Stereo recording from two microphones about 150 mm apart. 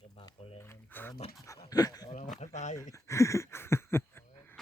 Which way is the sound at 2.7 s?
20° left (ahead or behind).